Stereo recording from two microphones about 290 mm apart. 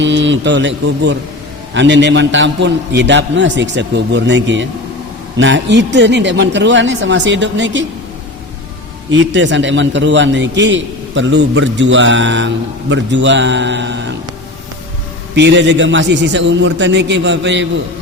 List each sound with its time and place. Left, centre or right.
0.0 s a man's voice: right
9.1 s a man's voice: right
15.4 s a man's voice: right